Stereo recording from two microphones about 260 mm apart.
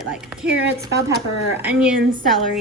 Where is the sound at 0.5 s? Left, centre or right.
Right.